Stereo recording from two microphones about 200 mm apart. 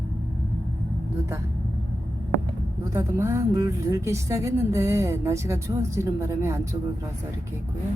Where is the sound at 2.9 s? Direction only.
15° right (ahead or behind).